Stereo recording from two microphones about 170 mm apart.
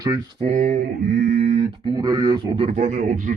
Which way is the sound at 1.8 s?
25° right (ahead or behind).